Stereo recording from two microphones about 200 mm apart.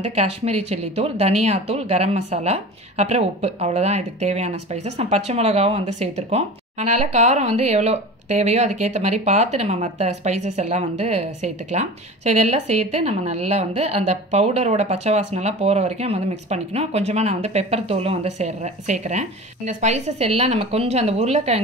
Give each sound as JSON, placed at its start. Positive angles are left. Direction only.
{"t": 0.1, "sound": "speech", "side_deg": -30}